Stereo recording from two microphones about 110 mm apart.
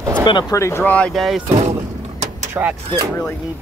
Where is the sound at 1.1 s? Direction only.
Centre (ahead or behind).